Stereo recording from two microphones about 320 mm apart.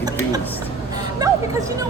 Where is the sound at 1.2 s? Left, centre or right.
Centre.